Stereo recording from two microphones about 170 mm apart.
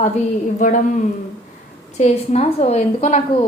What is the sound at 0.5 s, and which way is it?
Speech, 50° left (ahead or behind).